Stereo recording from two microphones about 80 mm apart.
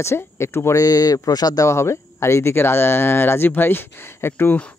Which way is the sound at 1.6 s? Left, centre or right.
Left.